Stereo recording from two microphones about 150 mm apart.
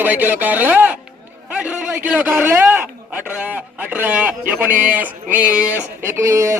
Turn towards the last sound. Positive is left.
turn(degrees=-20)  # may be behind; listen again after turning